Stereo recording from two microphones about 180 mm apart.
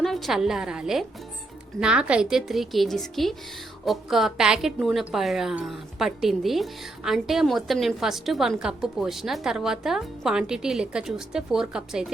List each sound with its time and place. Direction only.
0.0 s a woman's voice: centre (ahead or behind)